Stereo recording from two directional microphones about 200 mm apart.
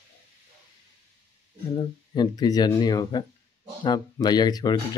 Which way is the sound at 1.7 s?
20° left (ahead or behind).